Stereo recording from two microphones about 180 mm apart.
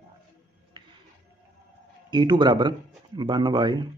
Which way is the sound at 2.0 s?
25° right (ahead or behind).